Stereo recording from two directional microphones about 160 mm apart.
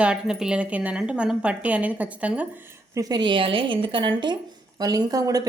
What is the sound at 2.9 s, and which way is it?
A woman's voice, 25° right (ahead or behind).